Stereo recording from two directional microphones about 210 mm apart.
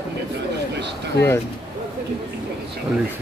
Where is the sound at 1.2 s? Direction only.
55° left (ahead or behind).